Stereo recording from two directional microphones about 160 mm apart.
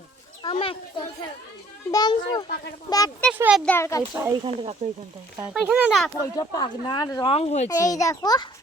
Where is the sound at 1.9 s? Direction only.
25° left (ahead or behind).